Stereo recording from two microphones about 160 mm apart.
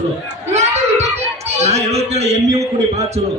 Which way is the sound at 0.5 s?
45° right (ahead or behind).